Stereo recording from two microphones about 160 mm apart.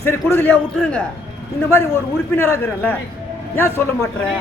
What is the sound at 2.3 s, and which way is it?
A man's voice, 15° left (ahead or behind).